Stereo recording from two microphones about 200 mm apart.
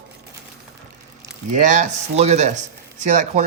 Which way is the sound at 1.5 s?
40° right (ahead or behind).